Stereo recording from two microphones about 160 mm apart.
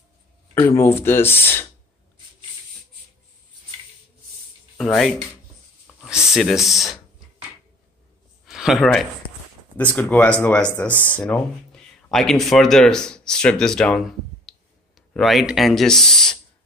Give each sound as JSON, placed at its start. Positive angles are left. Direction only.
{"t": 0.6, "sound": "speech", "side_deg": 15}
{"t": 4.7, "sound": "speech", "side_deg": 0}
{"t": 6.3, "sound": "speech", "side_deg": 0}
{"t": 8.5, "sound": "speech", "side_deg": 0}
{"t": 10.9, "sound": "speech", "side_deg": -15}
{"t": 11.7, "sound": "speech", "side_deg": 5}